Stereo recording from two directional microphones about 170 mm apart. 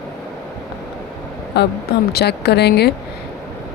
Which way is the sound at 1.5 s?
70° left (ahead or behind).